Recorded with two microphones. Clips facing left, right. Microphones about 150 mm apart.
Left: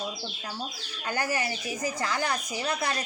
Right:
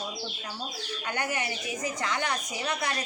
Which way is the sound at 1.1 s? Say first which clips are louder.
Left 3 dB; 35° left (ahead or behind).